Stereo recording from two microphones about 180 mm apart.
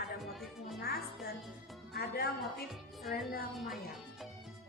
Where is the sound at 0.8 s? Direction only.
60° left (ahead or behind).